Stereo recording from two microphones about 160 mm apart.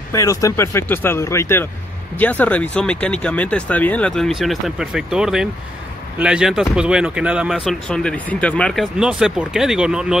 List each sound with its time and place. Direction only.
0.1 s speech: 20° left (ahead or behind); by 10.1 s 5° right (ahead or behind)